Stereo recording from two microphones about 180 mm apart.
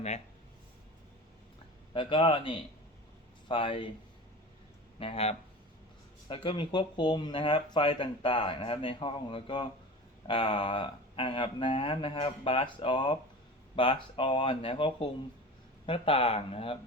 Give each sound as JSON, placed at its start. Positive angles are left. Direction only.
{"t": 1.9, "sound": "speech", "side_deg": 30}
{"t": 4.9, "sound": "speech", "side_deg": 30}